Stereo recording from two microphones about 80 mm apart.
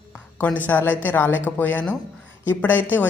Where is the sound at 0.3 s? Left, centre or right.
Centre.